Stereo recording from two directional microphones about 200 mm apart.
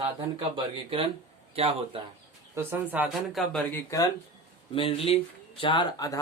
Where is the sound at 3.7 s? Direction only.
15° left (ahead or behind).